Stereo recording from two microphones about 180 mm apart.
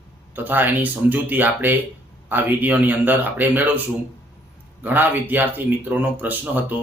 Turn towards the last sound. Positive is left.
turn(degrees=-10)  # may be behind; listen again after turning